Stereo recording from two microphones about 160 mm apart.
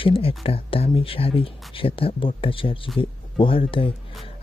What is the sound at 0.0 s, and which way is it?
Speech, 35° left (ahead or behind).